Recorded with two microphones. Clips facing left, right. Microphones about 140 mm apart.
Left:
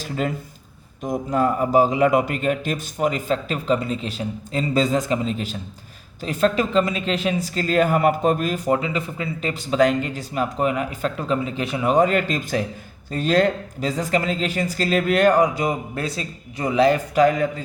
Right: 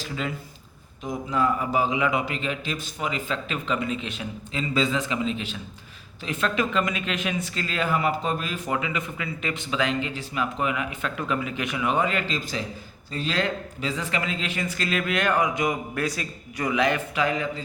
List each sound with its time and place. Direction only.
0.0 s a man's voice: 45° left (ahead or behind)